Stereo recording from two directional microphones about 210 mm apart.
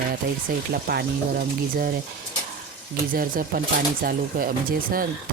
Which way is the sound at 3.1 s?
40° right (ahead or behind).